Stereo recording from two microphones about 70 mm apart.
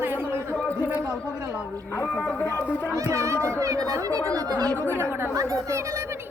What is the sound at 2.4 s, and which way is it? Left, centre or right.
Speech, left.